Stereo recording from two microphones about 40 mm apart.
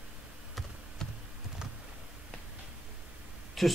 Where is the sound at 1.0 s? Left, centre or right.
Centre.